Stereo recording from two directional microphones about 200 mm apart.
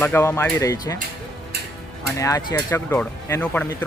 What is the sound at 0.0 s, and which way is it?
Speech, 10° left (ahead or behind).